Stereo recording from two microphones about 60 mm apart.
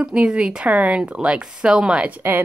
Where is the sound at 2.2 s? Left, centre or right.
Right.